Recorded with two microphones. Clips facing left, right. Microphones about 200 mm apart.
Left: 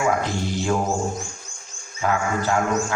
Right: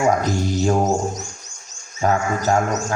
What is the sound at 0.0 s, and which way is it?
A man's voice, 40° right (ahead or behind).